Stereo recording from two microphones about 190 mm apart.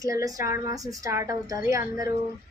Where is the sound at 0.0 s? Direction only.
20° right (ahead or behind).